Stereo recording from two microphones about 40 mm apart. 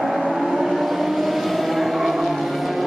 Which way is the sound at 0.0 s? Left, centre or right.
Centre.